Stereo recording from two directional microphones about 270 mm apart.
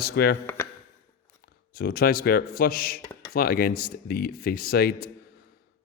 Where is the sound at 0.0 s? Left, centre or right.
Left.